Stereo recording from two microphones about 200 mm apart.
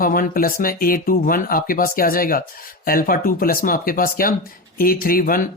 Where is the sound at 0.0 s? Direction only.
45° left (ahead or behind).